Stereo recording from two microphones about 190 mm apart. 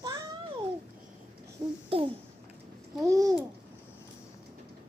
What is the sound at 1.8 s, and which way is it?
Speech, 30° right (ahead or behind).